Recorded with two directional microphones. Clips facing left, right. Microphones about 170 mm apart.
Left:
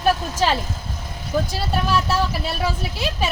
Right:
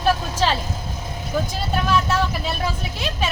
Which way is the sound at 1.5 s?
5° left (ahead or behind).